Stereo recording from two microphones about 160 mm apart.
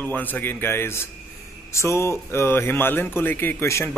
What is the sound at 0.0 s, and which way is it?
A man's voice, 10° left (ahead or behind).